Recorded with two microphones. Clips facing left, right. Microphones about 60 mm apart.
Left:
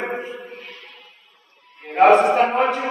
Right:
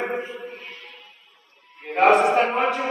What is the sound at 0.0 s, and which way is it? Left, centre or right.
Music, left.